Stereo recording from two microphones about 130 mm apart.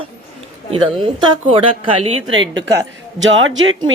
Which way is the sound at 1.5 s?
40° right (ahead or behind).